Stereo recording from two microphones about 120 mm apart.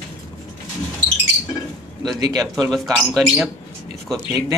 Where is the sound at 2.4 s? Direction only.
Centre (ahead or behind).